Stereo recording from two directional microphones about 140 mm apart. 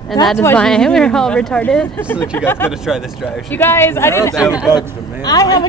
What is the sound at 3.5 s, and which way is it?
A man's voice, 15° left (ahead or behind).